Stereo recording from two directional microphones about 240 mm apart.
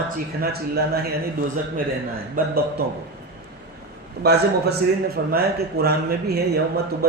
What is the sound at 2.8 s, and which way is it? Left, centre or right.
Speech, right.